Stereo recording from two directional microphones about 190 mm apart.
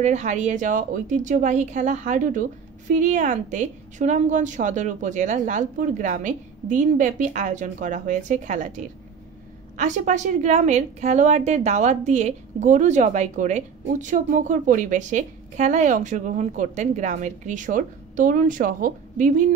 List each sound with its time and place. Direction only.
0.0 s a woman's voice: 40° right (ahead or behind)